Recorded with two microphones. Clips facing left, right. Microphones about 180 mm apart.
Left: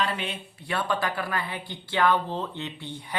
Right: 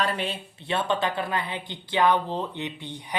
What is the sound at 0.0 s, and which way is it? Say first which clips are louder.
Speech: right 2 dB; 40° right (ahead or behind).